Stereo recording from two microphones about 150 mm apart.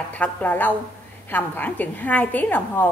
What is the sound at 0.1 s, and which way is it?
A woman's voice, 10° left (ahead or behind).